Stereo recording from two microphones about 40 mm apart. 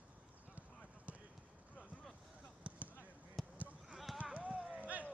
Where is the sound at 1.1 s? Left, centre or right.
Right.